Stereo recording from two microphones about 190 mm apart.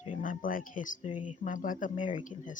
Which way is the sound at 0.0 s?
45° left (ahead or behind).